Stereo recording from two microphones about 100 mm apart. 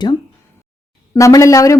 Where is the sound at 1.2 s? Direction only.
30° left (ahead or behind).